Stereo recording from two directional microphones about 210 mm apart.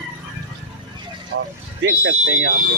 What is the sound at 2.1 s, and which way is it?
Speech, 65° right (ahead or behind).